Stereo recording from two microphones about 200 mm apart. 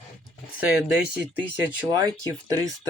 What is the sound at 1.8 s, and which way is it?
Speech, 15° right (ahead or behind).